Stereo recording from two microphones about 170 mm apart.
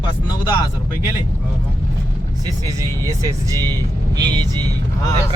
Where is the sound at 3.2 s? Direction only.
20° right (ahead or behind).